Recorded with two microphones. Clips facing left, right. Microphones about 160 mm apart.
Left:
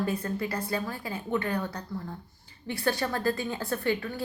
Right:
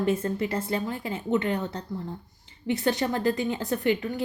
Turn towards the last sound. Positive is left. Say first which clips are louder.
# right 4 dB
turn(degrees=-20)  # may be behind; listen again after turning